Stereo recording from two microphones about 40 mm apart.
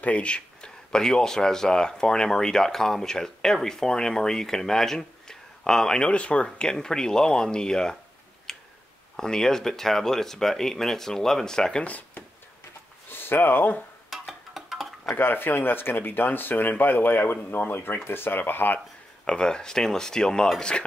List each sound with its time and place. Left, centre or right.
0.0 s speech: left
6.1 s speech: left
8.5 s tick-tock: centre
9.1 s speech: centre
13.1 s speech: left
14.5 s tick-tock: centre
15.1 s speech: left
19.2 s speech: left